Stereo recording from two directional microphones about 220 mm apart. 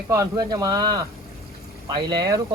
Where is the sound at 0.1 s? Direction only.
15° right (ahead or behind).